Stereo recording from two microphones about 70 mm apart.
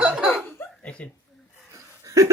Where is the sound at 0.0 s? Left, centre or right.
Centre.